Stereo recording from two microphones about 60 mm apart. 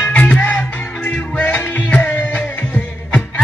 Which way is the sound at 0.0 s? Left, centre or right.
Left.